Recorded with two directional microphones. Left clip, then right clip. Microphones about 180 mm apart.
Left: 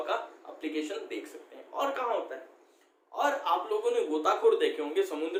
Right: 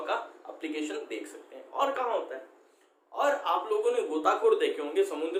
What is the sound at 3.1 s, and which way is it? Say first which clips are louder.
A man's voice: right 1 dB; 5° right (ahead or behind).